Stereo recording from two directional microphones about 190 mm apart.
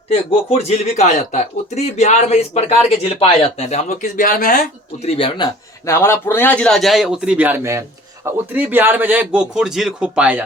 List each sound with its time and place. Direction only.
0.1 s a man's voice: 30° left (ahead or behind)
5.0 s speech: 30° left (ahead or behind)
5.8 s a man's voice: 15° left (ahead or behind); by 10.4 s 5° right (ahead or behind)